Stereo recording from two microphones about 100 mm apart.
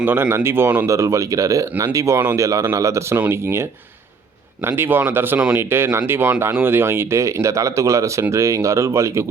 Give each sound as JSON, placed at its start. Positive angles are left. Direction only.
{"t": 0.0, "sound": "speech", "side_deg": -20}
{"t": 0.9, "sound": "speech", "side_deg": -30}